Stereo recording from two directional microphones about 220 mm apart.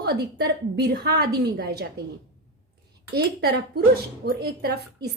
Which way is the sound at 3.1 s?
50° right (ahead or behind).